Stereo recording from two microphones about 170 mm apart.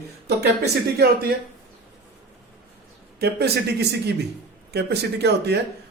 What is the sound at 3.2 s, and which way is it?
Speech, 75° right (ahead or behind).